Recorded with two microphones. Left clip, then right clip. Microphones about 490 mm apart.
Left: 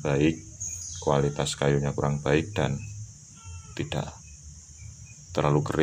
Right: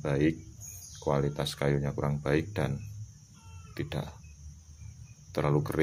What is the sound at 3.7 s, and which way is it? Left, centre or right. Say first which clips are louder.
Speech: left 5 dB; right.